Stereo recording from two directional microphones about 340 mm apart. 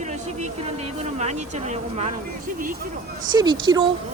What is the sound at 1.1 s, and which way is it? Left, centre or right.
Speech, centre.